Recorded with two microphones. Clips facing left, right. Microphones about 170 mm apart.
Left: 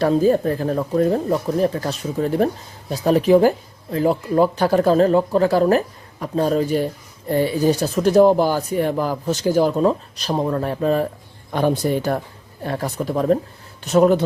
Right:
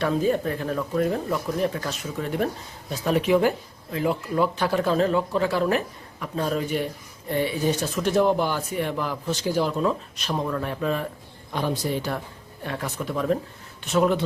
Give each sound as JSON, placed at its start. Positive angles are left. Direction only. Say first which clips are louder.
{"t": 0.0, "sound": "speech", "louder": "left 7 dB", "side_deg": 35}
{"t": 11.5, "sound": "speech", "louder": "left 7 dB", "side_deg": 50}
{"t": 12.6, "sound": "speech", "louder": "left 6 dB", "side_deg": 35}